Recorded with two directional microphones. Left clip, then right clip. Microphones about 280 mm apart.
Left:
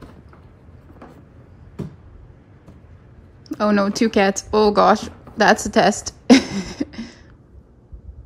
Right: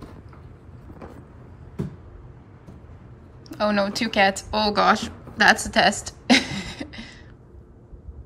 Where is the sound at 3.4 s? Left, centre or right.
Left.